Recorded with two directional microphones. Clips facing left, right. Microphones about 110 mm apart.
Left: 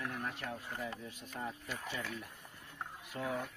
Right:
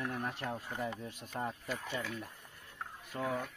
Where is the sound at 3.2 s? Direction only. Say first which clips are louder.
Right 2 dB; centre (ahead or behind).